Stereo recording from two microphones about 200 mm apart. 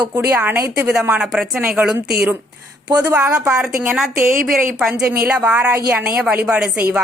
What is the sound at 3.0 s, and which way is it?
A woman's voice, 5° right (ahead or behind).